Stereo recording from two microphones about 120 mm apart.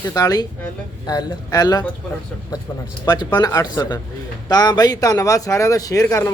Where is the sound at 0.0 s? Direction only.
30° left (ahead or behind).